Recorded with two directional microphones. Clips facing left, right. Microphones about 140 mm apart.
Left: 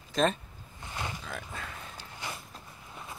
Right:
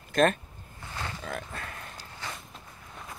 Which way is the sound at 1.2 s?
75° right (ahead or behind).